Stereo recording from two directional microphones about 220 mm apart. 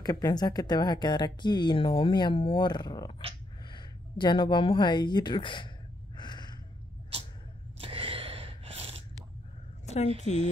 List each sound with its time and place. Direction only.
0.0 s speech: 15° left (ahead or behind)
6.1 s a sound: 20° left (ahead or behind)
7.8 s gasp: 25° right (ahead or behind)
10.2 s speech: 30° left (ahead or behind)